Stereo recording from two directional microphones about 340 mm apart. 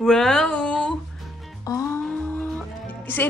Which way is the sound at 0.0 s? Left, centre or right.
Centre.